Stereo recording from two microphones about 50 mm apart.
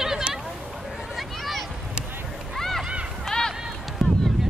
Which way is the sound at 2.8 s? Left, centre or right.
Centre.